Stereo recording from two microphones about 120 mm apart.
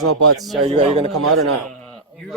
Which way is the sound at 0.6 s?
55° right (ahead or behind).